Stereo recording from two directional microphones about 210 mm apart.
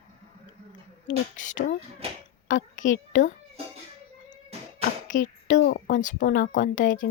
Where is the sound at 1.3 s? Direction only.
35° left (ahead or behind).